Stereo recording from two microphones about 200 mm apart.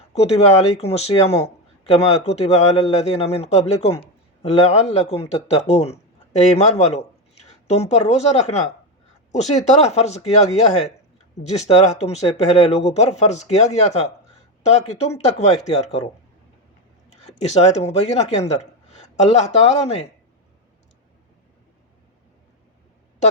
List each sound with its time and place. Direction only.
0.1 s speech: 30° left (ahead or behind)
17.1 s speech: 35° left (ahead or behind)